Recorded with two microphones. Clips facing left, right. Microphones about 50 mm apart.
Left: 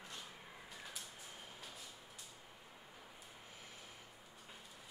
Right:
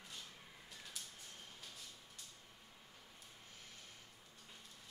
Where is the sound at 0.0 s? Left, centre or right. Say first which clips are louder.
Left 3 dB; centre.